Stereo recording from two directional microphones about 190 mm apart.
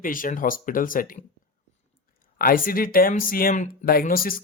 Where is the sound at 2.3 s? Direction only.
50° left (ahead or behind).